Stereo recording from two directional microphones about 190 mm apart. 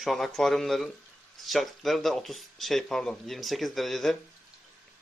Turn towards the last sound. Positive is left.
turn(degrees=0)  # may be behind; listen again after turning